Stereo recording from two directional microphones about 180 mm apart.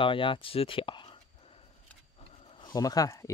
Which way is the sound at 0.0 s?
30° left (ahead or behind).